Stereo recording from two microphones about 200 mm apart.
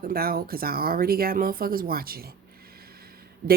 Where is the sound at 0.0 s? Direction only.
50° right (ahead or behind).